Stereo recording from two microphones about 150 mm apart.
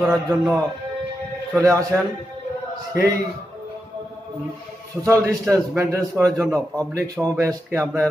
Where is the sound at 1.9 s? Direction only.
10° right (ahead or behind).